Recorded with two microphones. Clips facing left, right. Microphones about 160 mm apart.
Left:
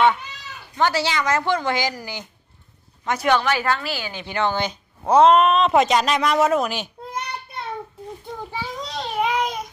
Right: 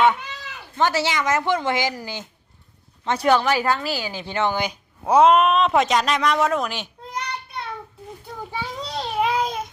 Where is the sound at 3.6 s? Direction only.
15° right (ahead or behind); by 6.9 s centre (ahead or behind).